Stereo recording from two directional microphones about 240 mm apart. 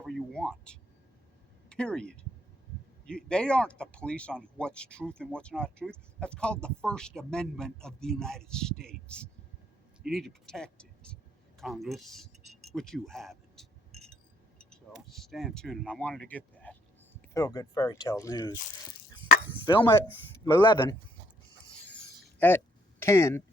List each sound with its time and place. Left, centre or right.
0.0 s a sound: centre
1.7 s speech: centre
11.6 s keys jangling: centre
14.6 s speech: centre
19.6 s speech: centre
22.4 s a sound: centre